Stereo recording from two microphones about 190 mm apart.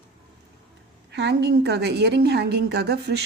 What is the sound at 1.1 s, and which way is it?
A woman's voice, 60° right (ahead or behind).